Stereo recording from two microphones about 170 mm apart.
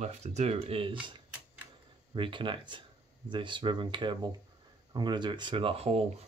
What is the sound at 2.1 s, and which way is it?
Speech, 30° right (ahead or behind).